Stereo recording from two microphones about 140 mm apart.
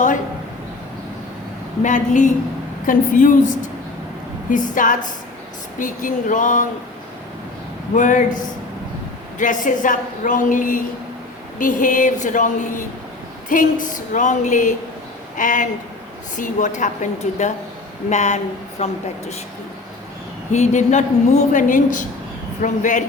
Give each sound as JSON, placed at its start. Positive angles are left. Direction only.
{"t": 1.8, "sound": "a woman's voice", "side_deg": 60}
{"t": 2.8, "sound": "a woman's voice", "side_deg": 75}
{"t": 4.5, "sound": "a woman's voice", "side_deg": 70}
{"t": 7.9, "sound": "a woman's voice", "side_deg": 65}
{"t": 9.4, "sound": "a woman's voice", "side_deg": 65}
{"t": 20.5, "sound": "a woman's voice", "side_deg": 55}